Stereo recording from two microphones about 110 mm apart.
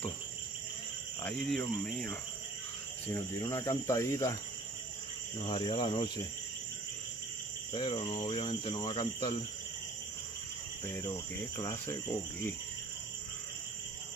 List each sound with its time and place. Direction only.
1.2 s cricket: 5° left (ahead or behind)
3.1 s cricket: 25° left (ahead or behind)
5.4 s cricket: 50° left (ahead or behind)
7.7 s cricket: 45° left (ahead or behind)
10.9 s cricket: 20° left (ahead or behind)